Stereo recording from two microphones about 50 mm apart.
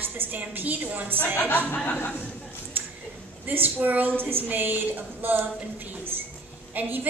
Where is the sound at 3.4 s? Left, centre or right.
Right.